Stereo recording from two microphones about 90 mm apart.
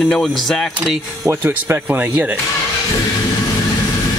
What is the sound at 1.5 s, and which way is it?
Speech, 20° right (ahead or behind).